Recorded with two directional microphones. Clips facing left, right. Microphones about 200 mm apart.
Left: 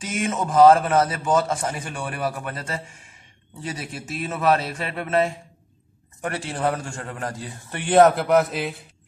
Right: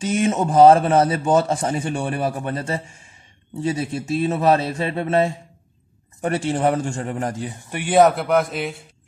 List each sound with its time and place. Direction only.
0.0 s a man's voice: 30° right (ahead or behind)
7.8 s a man's voice: 5° right (ahead or behind)